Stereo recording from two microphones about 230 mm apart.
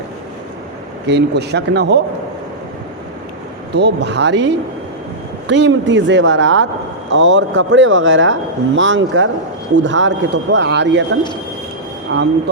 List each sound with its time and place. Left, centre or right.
1.0 s speech: right
3.8 s speech: right